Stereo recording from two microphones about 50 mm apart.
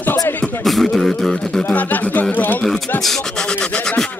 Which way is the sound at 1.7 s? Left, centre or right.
Left.